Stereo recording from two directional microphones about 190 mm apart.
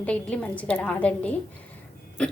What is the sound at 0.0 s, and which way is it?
A woman's voice, 5° left (ahead or behind).